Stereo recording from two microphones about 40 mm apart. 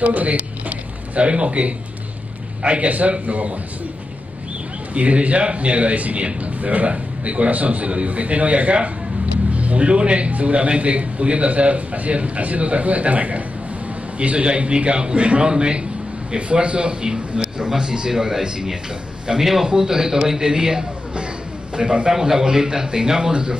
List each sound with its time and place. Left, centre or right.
0.0 s a man's voice: right
4.9 s a man's voice: right
22.1 s a man's voice: centre